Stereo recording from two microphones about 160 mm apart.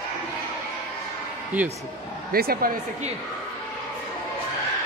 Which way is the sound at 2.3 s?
70° right (ahead or behind).